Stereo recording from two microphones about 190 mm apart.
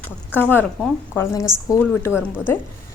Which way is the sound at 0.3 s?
10° left (ahead or behind).